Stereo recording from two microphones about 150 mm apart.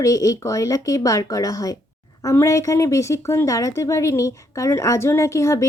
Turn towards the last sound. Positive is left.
turn(degrees=20)  # may be behind; listen again after turning